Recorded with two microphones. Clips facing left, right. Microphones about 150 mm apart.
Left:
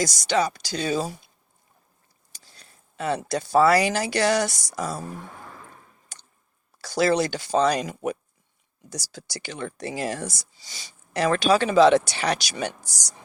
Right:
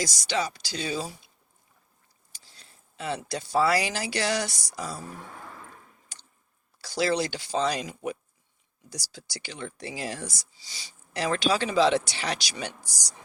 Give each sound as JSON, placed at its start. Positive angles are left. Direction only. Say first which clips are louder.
{"t": 0.0, "sound": "speech", "louder": "left 6 dB", "side_deg": 50}
{"t": 2.3, "sound": "speech", "louder": "left 3 dB", "side_deg": 50}
{"t": 6.8, "sound": "speech", "louder": "left 5 dB", "side_deg": 50}